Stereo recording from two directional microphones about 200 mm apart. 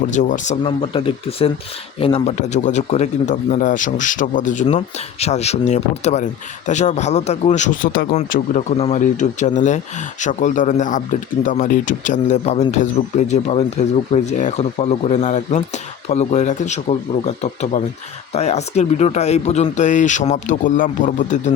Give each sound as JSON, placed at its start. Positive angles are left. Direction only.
{"t": 0.1, "sound": "speech", "side_deg": 40}